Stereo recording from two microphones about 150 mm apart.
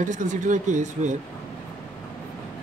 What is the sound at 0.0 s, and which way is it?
Speech, 55° right (ahead or behind).